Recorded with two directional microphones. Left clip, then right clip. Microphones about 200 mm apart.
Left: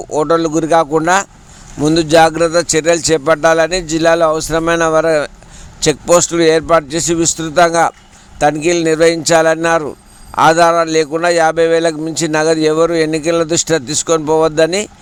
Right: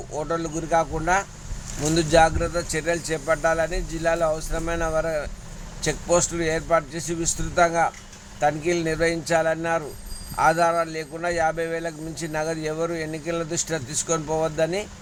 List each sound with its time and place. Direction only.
0.1 s a man's voice: 45° left (ahead or behind)